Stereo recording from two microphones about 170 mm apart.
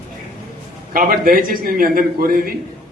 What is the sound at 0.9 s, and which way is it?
A man's voice, 60° right (ahead or behind).